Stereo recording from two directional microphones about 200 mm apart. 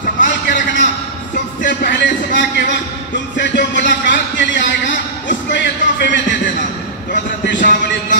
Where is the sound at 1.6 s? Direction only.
60° left (ahead or behind).